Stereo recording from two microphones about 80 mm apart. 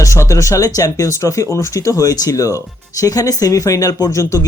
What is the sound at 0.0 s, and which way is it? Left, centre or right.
Speech, left.